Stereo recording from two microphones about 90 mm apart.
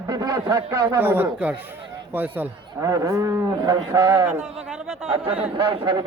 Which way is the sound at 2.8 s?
40° right (ahead or behind).